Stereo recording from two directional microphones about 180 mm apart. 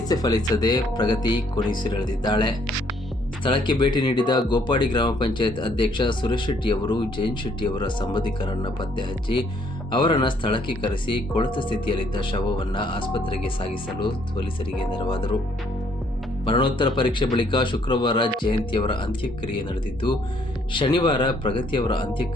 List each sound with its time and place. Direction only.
0.0 s speech: 20° left (ahead or behind)
16.5 s speech: 30° left (ahead or behind)